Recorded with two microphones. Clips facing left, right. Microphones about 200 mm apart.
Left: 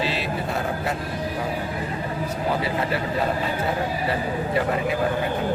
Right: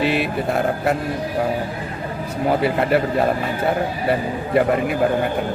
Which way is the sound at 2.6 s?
60° right (ahead or behind).